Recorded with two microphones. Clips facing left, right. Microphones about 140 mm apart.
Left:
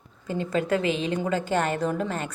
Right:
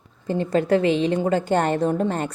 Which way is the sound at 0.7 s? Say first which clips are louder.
Right 8 dB; 35° right (ahead or behind).